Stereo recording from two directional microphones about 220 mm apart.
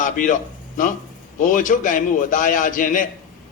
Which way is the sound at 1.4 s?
35° left (ahead or behind).